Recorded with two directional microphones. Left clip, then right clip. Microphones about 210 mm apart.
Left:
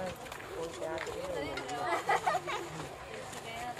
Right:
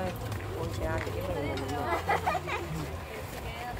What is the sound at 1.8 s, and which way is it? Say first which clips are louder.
Speech: right 1 dB; 40° left (ahead or behind).